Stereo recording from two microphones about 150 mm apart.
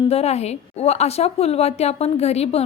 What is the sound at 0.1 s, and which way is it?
A woman's voice, 45° left (ahead or behind).